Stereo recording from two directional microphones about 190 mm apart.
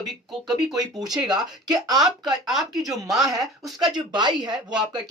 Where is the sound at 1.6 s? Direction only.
20° right (ahead or behind).